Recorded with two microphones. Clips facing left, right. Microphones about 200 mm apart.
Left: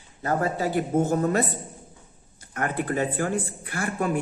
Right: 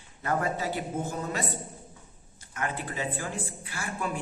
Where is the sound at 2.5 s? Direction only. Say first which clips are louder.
Left 7 dB; 55° left (ahead or behind).